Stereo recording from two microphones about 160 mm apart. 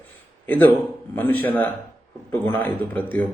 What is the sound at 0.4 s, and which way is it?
A man's voice, 10° left (ahead or behind).